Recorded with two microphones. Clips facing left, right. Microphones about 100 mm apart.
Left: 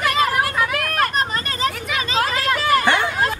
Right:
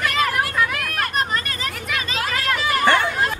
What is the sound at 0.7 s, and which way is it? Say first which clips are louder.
Children playing: left 3 dB; 45° left (ahead or behind).